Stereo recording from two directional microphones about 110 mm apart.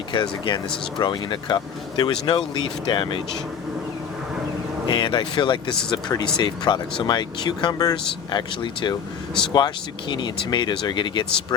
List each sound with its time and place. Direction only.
0.1 s speech: 45° left (ahead or behind)
4.9 s speech: 50° left (ahead or behind)